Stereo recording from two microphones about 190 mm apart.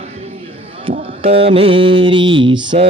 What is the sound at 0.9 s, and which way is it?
Mantra, 30° right (ahead or behind).